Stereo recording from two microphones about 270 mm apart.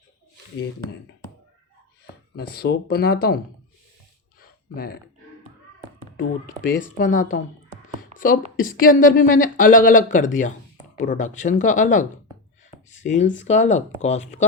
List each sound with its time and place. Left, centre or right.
2.3 s speech: left
4.7 s speech: left
6.1 s speech: left
8.5 s speech: left
12.9 s a sound: left
13.4 s speech: left